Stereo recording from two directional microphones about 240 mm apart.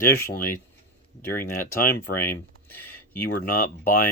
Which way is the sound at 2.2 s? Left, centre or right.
Centre.